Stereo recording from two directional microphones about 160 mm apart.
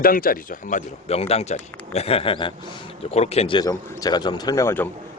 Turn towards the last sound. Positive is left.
turn(degrees=15)  # may be behind; listen again after turning